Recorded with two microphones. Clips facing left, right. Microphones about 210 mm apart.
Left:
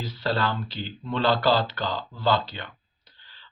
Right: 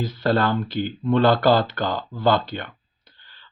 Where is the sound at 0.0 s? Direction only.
50° right (ahead or behind).